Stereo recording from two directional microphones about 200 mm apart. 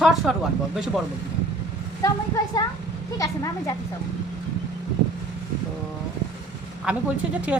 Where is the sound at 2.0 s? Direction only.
15° left (ahead or behind).